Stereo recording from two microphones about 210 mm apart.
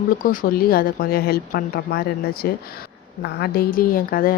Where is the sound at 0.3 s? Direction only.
45° left (ahead or behind).